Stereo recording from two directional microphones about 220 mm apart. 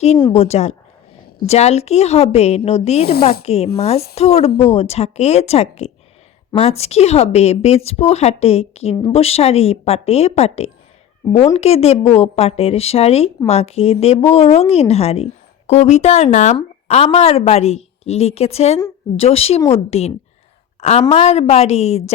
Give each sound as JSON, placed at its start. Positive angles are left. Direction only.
{"t": 0.2, "sound": "speech", "side_deg": 25}